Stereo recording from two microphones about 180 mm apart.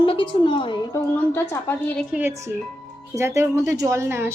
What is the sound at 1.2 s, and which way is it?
Speech, 15° left (ahead or behind).